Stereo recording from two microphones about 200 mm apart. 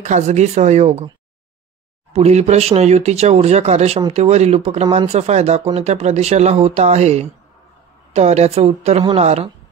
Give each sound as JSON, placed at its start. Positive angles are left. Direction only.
{"t": 0.0, "sound": "speech", "side_deg": -35}
{"t": 2.1, "sound": "speech", "side_deg": -30}